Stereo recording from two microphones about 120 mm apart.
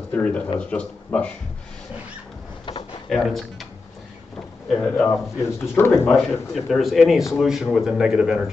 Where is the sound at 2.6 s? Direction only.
45° left (ahead or behind).